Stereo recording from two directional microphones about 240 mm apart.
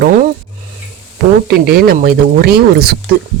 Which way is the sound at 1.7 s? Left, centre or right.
Right.